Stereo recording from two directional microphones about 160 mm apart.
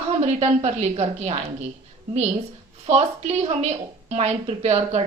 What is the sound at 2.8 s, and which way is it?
A woman's voice, 40° right (ahead or behind).